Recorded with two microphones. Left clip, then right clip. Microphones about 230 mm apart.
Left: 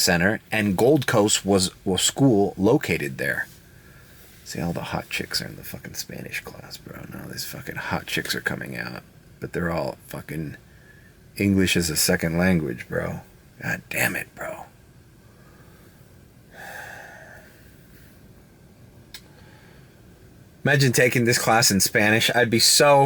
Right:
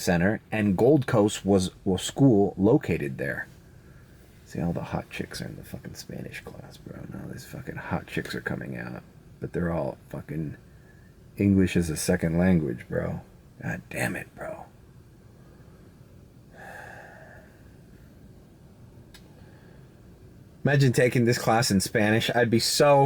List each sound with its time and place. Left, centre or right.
0.0 s speech: centre
2.3 s speech: right
2.6 s speech: centre
4.4 s speech: centre
16.6 s gasp: centre
20.7 s speech: centre